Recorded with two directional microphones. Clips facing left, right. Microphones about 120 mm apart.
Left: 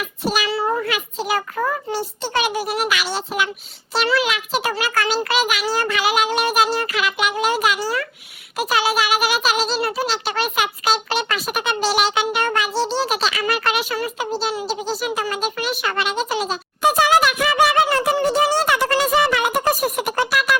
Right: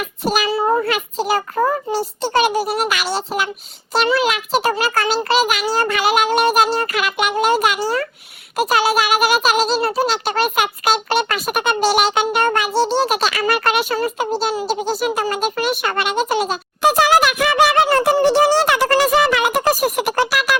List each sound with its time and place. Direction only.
0.0 s a child's voice: 45° right (ahead or behind)
0.5 s a child's voice: 30° right (ahead or behind)
0.9 s a child's voice: 45° right (ahead or behind); by 17.8 s 60° right (ahead or behind)
18.2 s speech: 75° right (ahead or behind)
19.0 s a sound: 85° right